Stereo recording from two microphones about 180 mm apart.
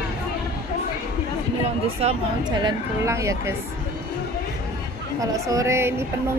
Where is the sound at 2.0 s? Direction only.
35° right (ahead or behind).